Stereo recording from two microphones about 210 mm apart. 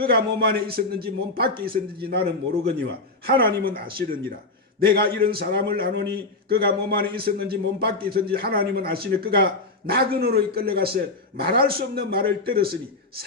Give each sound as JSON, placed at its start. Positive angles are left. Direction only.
{"t": 0.0, "sound": "a man's voice", "side_deg": -45}
{"t": 3.2, "sound": "a man's voice", "side_deg": -45}